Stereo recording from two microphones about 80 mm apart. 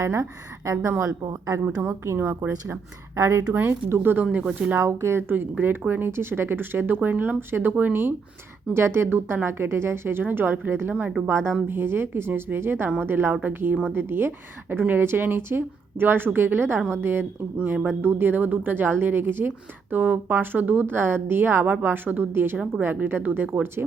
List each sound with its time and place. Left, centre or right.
0.0 s a woman's voice: right
2.1 s a woman's voice: right
3.2 s a woman's voice: right
3.5 s a woman's voice: right
4.8 s a woman's voice: right
5.3 s a woman's voice: right